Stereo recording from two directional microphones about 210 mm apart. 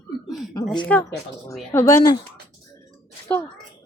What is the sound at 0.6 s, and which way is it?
Speech, 5° left (ahead or behind).